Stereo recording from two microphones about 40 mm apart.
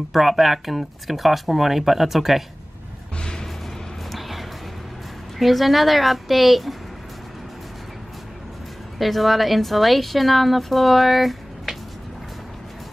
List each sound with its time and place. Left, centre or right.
0.1 s a woman's voice: centre
3.2 s music: centre
4.1 s a sound: centre
5.4 s a woman's voice: centre
8.9 s a woman's voice: centre